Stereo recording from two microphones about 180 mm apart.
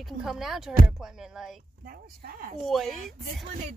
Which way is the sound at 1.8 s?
55° right (ahead or behind).